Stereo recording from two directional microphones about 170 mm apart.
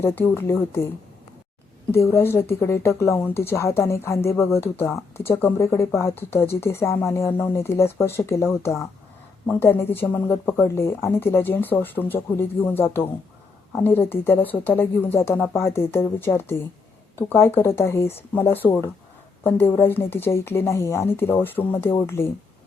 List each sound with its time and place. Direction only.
0.0 s a woman's voice: 10° left (ahead or behind)
2.0 s a woman's voice: 15° left (ahead or behind)